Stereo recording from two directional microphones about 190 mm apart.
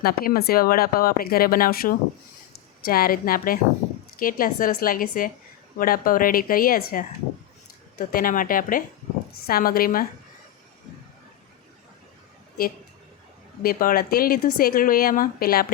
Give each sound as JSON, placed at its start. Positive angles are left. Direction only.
{"t": 0.0, "sound": "a woman's voice", "side_deg": 50}
{"t": 13.6, "sound": "speech", "side_deg": 50}